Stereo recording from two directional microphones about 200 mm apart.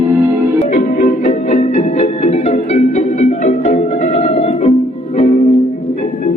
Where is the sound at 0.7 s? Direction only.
40° left (ahead or behind).